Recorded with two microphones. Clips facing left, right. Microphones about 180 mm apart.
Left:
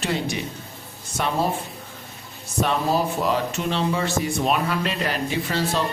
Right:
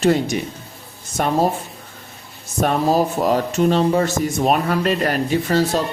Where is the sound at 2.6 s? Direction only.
45° right (ahead or behind).